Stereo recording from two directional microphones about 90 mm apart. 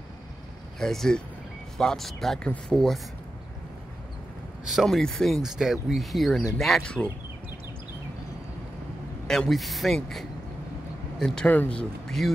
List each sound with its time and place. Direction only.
0.7 s speech: 5° left (ahead or behind)
4.6 s speech: centre (ahead or behind)
9.3 s speech: 5° left (ahead or behind)
11.4 s speech: 20° left (ahead or behind)